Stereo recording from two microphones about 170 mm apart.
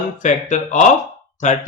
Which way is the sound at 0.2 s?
45° left (ahead or behind).